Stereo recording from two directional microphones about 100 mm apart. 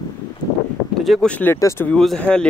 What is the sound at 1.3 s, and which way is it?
Speech, 15° left (ahead or behind).